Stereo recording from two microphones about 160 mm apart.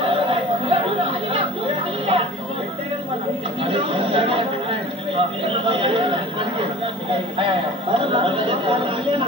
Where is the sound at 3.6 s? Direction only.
35° right (ahead or behind).